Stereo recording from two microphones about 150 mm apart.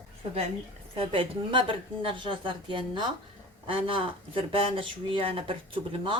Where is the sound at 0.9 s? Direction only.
35° right (ahead or behind).